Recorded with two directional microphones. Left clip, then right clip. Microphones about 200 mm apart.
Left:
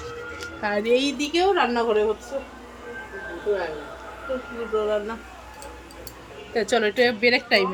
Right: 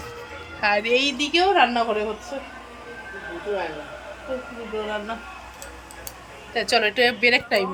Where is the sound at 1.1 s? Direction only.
5° right (ahead or behind).